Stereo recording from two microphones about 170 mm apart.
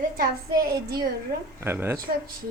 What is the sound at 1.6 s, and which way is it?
Speech, 15° right (ahead or behind).